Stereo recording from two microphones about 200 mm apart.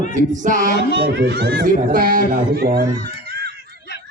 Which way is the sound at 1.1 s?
55° right (ahead or behind).